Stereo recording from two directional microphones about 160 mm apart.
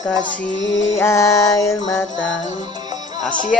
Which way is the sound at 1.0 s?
20° left (ahead or behind).